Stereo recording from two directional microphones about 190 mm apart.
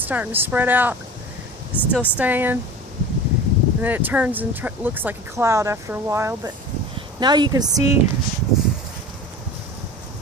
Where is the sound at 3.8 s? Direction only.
10° right (ahead or behind).